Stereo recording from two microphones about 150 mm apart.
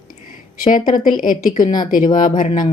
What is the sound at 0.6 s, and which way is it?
A woman's voice, 60° left (ahead or behind).